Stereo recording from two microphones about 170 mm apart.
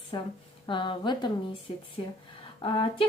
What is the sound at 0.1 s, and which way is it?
A woman's voice, 25° left (ahead or behind).